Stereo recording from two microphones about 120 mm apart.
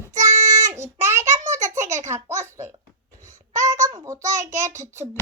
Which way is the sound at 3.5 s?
30° right (ahead or behind).